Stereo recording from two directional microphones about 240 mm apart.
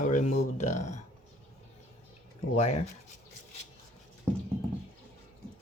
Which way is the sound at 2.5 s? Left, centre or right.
Left.